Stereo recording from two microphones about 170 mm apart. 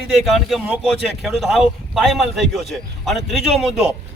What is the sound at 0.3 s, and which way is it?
A man's voice, centre (ahead or behind).